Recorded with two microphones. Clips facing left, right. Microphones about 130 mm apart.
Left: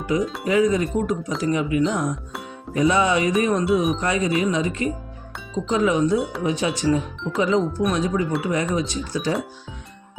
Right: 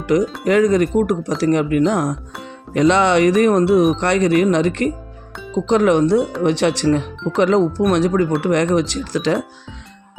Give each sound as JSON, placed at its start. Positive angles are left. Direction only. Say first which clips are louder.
{"t": 0.0, "sound": "speech", "louder": "right 6 dB", "side_deg": -80}
{"t": 7.3, "sound": "speech", "louder": "right 5 dB", "side_deg": -70}